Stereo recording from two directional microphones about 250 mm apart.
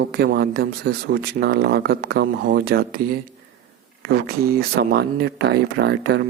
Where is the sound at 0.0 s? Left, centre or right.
Right.